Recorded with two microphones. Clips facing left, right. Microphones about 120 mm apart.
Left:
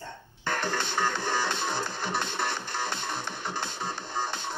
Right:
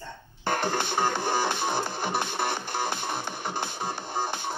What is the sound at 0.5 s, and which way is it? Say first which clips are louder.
Music: right 3 dB; 55° right (ahead or behind).